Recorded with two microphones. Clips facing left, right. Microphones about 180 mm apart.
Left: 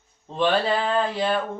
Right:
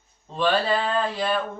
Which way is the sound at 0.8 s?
20° left (ahead or behind).